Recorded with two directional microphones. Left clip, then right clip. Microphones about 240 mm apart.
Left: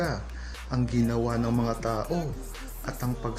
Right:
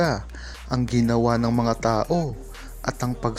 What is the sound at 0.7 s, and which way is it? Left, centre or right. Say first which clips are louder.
Speech: right 6 dB; right.